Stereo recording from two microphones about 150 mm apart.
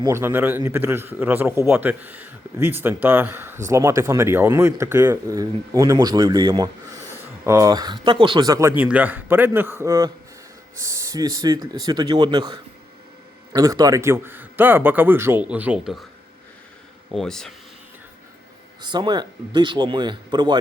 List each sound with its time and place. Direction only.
0.0 s speech: 15° right (ahead or behind)
17.2 s speech: 5° left (ahead or behind)
18.8 s speech: 30° right (ahead or behind)